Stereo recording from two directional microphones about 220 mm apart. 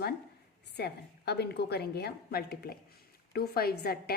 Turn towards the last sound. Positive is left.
turn(degrees=45)  # may be behind; listen again after turning